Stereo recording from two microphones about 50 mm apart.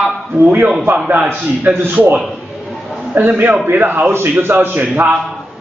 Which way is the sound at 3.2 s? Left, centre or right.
Right.